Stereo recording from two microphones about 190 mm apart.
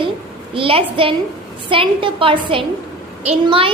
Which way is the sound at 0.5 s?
30° right (ahead or behind).